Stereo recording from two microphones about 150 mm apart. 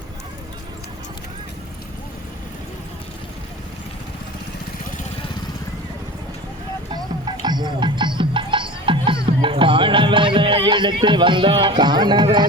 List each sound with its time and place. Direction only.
6.9 s music: 30° right (ahead or behind)
10.7 s speech: 30° right (ahead or behind)